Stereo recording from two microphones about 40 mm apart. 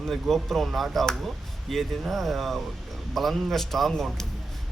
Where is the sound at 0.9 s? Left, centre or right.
Centre.